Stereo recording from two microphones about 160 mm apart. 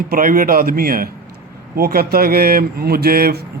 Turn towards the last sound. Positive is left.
turn(degrees=-70)  # may be behind; listen again after turning